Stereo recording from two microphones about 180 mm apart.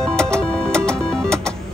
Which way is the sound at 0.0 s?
5° left (ahead or behind).